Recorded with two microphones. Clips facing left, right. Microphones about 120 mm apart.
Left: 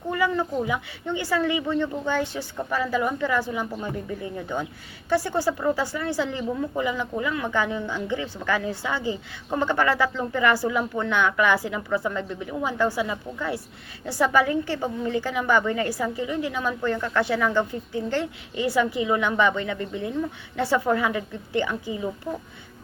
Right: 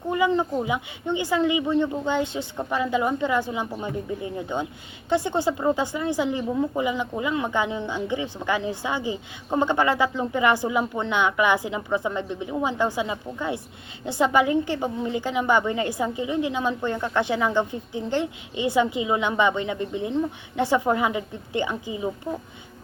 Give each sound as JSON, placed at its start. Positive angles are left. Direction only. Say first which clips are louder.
{"t": 0.1, "sound": "a woman's voice", "louder": "right 2 dB", "side_deg": -20}